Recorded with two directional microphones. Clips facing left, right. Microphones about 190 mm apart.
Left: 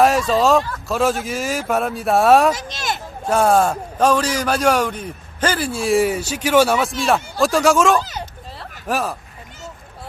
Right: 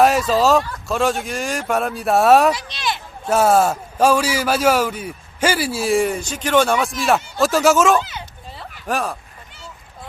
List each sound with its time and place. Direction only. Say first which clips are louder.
0.0 s a man's voice: even; centre (ahead or behind)
2.6 s speech: even; 45° left (ahead or behind)
3.2 s a man's voice: even; 5° right (ahead or behind)